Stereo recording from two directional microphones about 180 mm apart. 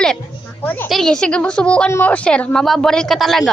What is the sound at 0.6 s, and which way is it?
A child's voice, 10° left (ahead or behind).